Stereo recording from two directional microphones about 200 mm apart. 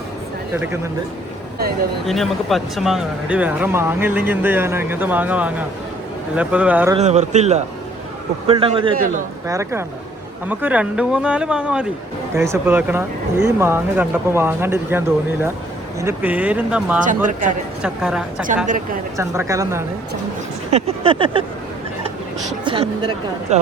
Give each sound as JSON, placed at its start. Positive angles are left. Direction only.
{"t": 0.5, "sound": "speech", "side_deg": -10}
{"t": 2.0, "sound": "speech", "side_deg": 0}
{"t": 7.0, "sound": "a man's voice", "side_deg": -35}
{"t": 8.4, "sound": "a sound", "side_deg": -25}
{"t": 9.0, "sound": "a man's voice", "side_deg": -40}
{"t": 9.5, "sound": "speech", "side_deg": -15}
{"t": 19.1, "sound": "speech", "side_deg": -15}
{"t": 20.7, "sound": "a sound", "side_deg": -30}
{"t": 22.6, "sound": "a sound", "side_deg": -25}
{"t": 23.5, "sound": "speech", "side_deg": -35}